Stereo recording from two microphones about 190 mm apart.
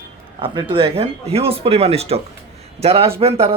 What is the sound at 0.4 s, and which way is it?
A man's voice, 25° right (ahead or behind).